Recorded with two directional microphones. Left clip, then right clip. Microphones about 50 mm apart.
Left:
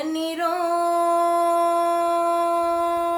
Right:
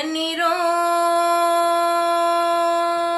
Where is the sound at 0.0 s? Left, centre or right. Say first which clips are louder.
Right 3 dB; left.